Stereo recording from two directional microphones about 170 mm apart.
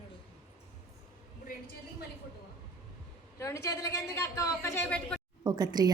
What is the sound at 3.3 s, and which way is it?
A woman's voice, 20° left (ahead or behind).